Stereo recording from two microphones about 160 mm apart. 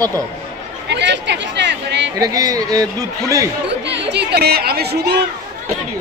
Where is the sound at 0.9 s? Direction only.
90° right.